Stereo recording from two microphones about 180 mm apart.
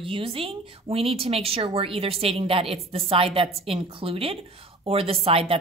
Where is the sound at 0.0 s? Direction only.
30° right (ahead or behind).